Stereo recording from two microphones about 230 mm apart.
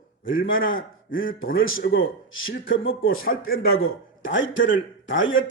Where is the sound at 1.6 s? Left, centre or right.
Left.